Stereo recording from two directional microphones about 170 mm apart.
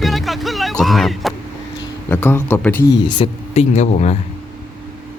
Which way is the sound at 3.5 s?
40° left (ahead or behind).